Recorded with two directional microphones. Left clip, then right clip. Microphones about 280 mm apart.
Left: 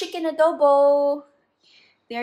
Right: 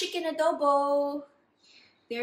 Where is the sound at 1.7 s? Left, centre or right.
Left.